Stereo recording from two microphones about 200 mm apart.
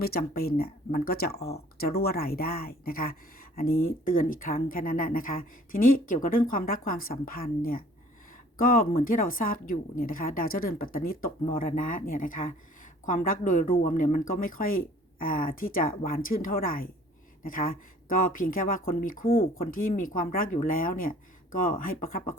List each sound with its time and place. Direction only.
0.0 s a woman's voice: 50° left (ahead or behind)